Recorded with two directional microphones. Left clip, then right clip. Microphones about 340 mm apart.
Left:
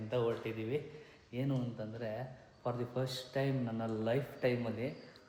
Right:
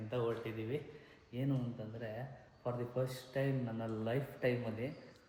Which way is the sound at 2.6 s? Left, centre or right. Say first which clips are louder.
Left 1 dB; centre.